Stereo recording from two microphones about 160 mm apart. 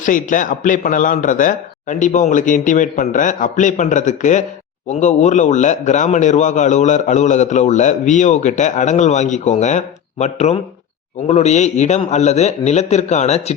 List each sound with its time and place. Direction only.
0.0 s a man's voice: 55° left (ahead or behind)